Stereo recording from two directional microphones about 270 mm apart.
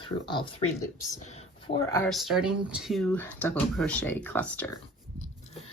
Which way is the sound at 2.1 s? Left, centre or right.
Centre.